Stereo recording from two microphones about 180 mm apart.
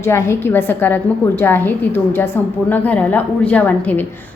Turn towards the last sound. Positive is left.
turn(degrees=10)  # may be behind; listen again after turning